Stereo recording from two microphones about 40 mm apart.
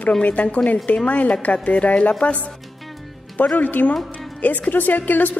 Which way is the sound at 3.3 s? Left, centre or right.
Left.